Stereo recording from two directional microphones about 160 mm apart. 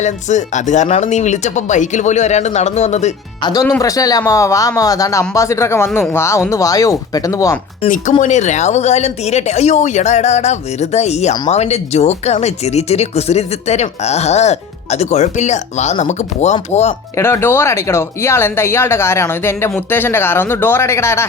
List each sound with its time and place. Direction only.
0.0 s speech: 50° left (ahead or behind)
3.4 s speech: 25° left (ahead or behind)
8.2 s speech: 50° left (ahead or behind)
17.2 s speech: 15° left (ahead or behind)